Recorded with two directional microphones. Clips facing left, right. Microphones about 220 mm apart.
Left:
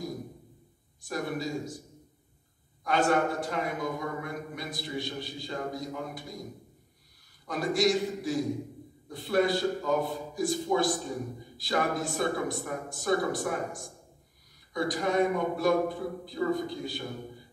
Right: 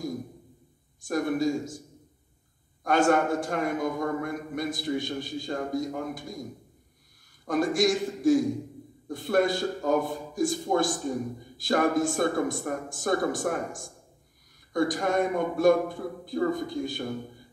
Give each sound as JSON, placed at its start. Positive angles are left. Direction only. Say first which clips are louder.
{"t": 1.0, "sound": "a man's voice", "louder": "right 7 dB", "side_deg": -50}
{"t": 2.8, "sound": "a man's voice", "louder": "right 3 dB", "side_deg": -50}
{"t": 7.4, "sound": "a man's voice", "louder": "right 3 dB", "side_deg": -50}